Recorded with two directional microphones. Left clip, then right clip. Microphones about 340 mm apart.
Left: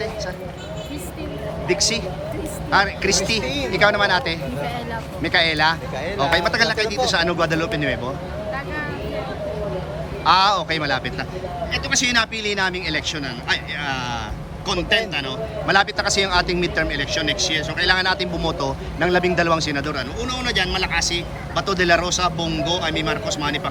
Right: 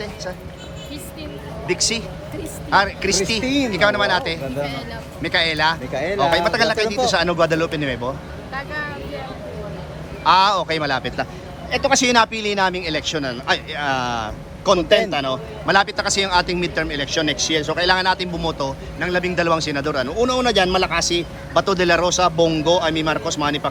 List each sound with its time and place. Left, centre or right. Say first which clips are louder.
1.6 s a man's voice: even; centre
3.4 s speech: right 4 dB; right
3.7 s a man's voice: left 2 dB; centre
5.9 s speech: right 4 dB; centre
6.3 s a man's voice: left 2 dB; centre
8.5 s vehicle: right 5 dB; centre
10.2 s a man's voice: right 1 dB; centre